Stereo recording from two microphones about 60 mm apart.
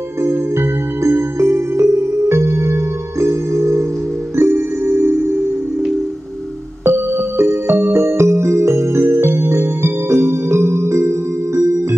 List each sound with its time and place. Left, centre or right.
0.2 s music: right
6.8 s music: right